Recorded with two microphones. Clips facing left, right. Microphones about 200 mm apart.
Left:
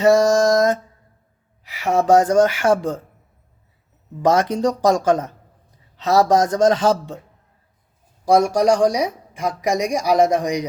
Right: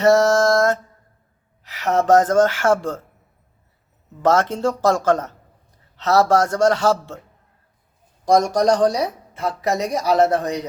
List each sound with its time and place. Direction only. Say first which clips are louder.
0.0 s speech: left 1 dB; 10° left (ahead or behind)
4.2 s speech: left 1 dB; 15° left (ahead or behind)
8.2 s speech: left 1 dB; 10° left (ahead or behind)